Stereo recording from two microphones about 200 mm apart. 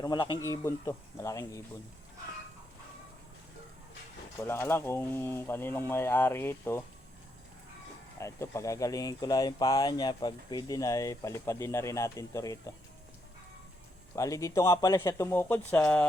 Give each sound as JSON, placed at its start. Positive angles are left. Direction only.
{"t": 0.0, "sound": "speech", "side_deg": 20}
{"t": 4.4, "sound": "speech", "side_deg": 10}
{"t": 8.2, "sound": "speech", "side_deg": 15}
{"t": 14.2, "sound": "speech", "side_deg": 15}